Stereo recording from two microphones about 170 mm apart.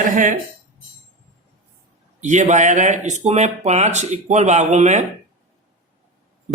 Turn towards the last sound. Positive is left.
turn(degrees=-45)  # may be behind; listen again after turning